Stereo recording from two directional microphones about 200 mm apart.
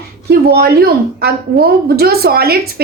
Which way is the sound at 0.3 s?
50° right (ahead or behind).